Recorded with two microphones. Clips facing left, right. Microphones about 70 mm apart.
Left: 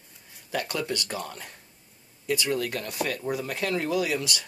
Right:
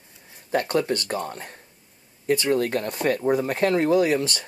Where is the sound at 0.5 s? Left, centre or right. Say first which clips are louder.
Right 7 dB; right.